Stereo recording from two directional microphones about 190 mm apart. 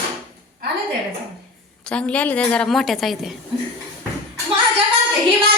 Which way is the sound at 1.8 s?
5° left (ahead or behind).